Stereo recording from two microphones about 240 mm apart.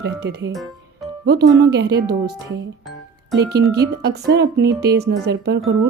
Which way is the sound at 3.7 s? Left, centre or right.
Right.